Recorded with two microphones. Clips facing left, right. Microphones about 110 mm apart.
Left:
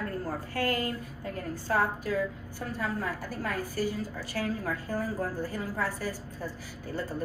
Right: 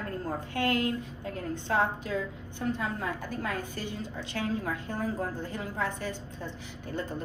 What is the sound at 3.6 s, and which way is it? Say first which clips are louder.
A woman's voice: left 5 dB; 20° right (ahead or behind).